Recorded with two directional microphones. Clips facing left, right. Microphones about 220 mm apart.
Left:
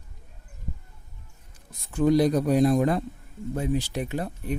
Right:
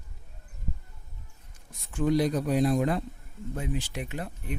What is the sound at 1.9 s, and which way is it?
Speech, 40° left (ahead or behind).